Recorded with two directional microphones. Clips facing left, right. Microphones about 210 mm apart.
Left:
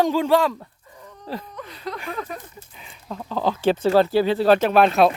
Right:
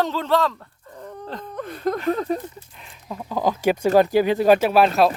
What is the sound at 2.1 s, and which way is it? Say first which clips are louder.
Speech: right 10 dB; 35° right (ahead or behind).